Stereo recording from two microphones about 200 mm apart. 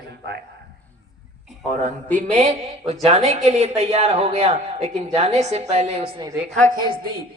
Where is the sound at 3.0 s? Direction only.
30° right (ahead or behind).